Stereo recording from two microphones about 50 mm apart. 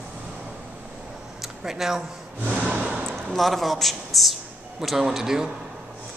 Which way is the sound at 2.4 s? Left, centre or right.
Right.